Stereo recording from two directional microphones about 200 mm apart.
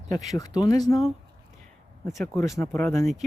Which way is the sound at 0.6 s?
20° left (ahead or behind).